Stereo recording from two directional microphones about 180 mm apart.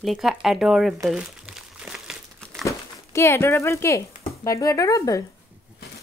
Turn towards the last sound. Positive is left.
turn(degrees=15)  # may be behind; listen again after turning